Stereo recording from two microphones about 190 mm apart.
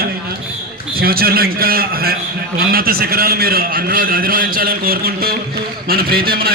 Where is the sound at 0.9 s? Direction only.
50° right (ahead or behind).